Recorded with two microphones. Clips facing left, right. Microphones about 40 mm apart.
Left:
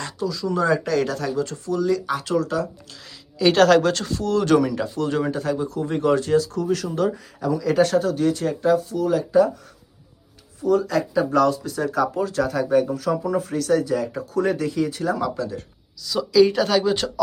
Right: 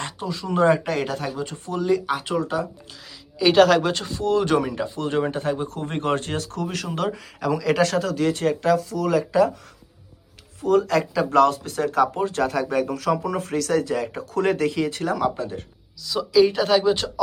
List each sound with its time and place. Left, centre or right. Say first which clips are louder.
0.0 s speech: left 3 dB; right
3.3 s speech: even; centre; by 7.4 s right
7.4 s speech: left 1 dB; right
8.3 s speech: right 1 dB; right
8.6 s speech: left 4 dB; right
10.6 s speech: right 1 dB; right
12.1 s speech: even; right
12.4 s speech: left 4 dB; right
15.2 s speech: right 1 dB; right
16.0 s speech: left 1 dB; centre